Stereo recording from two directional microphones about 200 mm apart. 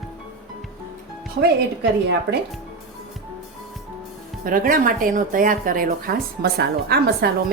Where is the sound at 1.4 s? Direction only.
55° right (ahead or behind).